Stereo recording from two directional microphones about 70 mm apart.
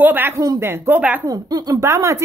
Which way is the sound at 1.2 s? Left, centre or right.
Right.